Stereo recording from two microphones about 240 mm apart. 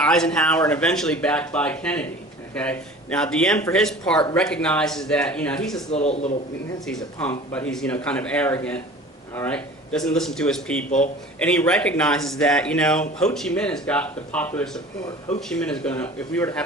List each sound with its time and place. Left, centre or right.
0.0 s speech: centre
5.9 s speech: left
6.8 s speech: centre
10.8 s a man's voice: left
11.3 s speech: centre